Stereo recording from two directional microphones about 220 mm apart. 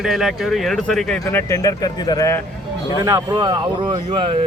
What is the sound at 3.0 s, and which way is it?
Speech, 15° right (ahead or behind).